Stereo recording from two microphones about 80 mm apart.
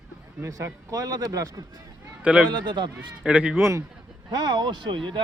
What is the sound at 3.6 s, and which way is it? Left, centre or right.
Speech, right.